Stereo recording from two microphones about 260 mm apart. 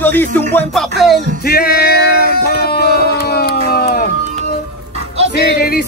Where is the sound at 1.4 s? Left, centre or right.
Left.